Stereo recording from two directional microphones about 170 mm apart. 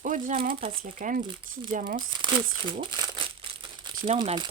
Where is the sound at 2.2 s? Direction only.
30° right (ahead or behind).